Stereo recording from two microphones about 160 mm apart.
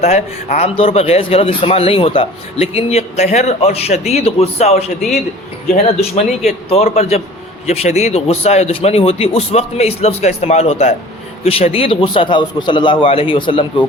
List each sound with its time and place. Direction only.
0.0 s speech: 40° left (ahead or behind)
4.9 s a man's voice: centre (ahead or behind)
5.7 s speech: 40° left (ahead or behind)